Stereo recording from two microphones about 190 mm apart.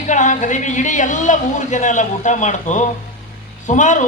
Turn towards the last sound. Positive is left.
turn(degrees=40)  # may be behind; listen again after turning